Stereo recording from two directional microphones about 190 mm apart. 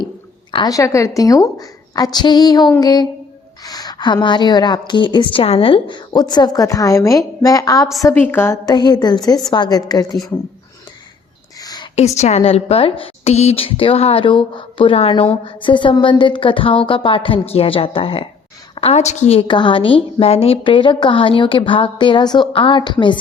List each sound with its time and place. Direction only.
0.5 s a woman's voice: 20° left (ahead or behind)
11.6 s a sound: 20° left (ahead or behind)
11.9 s a woman's voice: 35° left (ahead or behind)